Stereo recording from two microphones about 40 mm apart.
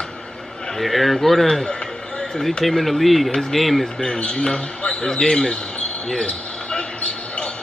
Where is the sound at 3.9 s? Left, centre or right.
Left.